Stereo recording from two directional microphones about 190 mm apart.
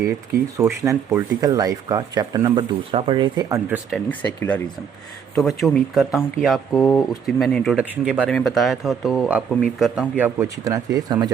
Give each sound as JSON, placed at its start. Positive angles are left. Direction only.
{"t": 0.5, "sound": "speech", "side_deg": -15}
{"t": 3.9, "sound": "speech", "side_deg": 10}